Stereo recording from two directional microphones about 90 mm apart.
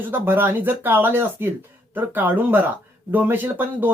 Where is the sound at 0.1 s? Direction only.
20° right (ahead or behind).